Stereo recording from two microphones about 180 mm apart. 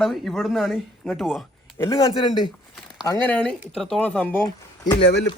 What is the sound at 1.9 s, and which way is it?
Speech, 25° left (ahead or behind).